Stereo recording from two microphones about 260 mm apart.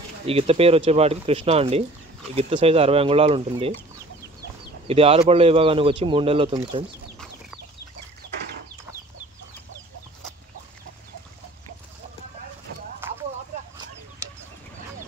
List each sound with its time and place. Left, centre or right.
0.3 s speech: right
4.8 s speech: right
13.0 s clip-clop: centre